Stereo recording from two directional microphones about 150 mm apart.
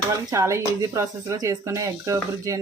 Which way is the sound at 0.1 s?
20° right (ahead or behind).